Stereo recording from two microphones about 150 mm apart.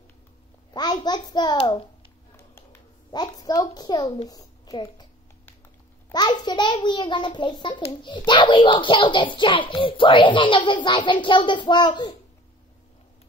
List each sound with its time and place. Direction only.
0.7 s a child's voice: 30° left (ahead or behind)
2.3 s a sound: 15° left (ahead or behind)
3.1 s a woman's voice: 25° left (ahead or behind)
6.1 s a child's voice: 30° left (ahead or behind)